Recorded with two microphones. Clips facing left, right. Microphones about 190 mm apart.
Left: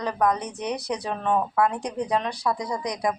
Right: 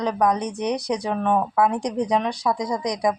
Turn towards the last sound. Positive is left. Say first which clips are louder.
# right 4 dB
turn(degrees=-15)  # may be behind; listen again after turning